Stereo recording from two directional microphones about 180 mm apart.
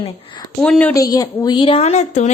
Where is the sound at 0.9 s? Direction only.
20° left (ahead or behind); by 2.3 s 40° left (ahead or behind).